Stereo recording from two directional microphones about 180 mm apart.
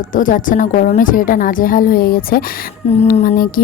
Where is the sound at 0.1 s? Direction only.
45° left (ahead or behind).